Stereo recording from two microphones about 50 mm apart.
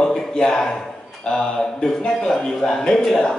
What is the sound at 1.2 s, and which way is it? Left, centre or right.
Speech, centre.